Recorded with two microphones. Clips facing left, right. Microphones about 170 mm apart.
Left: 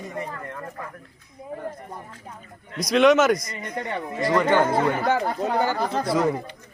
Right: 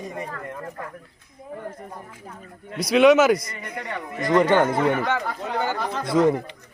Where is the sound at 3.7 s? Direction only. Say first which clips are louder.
Left 3 dB; 30° left (ahead or behind).